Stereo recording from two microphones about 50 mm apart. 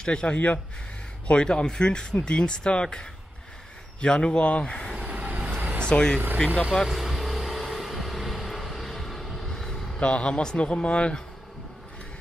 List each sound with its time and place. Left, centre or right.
0.0 s speech: centre
4.9 s vehicle: right
5.8 s speech: centre
6.9 s vehicle: centre
9.9 s speech: left